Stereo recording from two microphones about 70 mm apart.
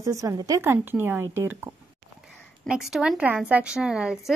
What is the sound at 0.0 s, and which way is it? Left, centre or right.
Speech, right.